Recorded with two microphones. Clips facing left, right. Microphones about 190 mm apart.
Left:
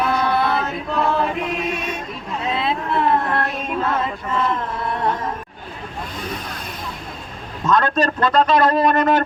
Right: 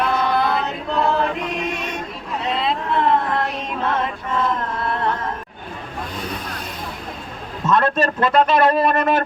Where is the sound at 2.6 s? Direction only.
5° left (ahead or behind).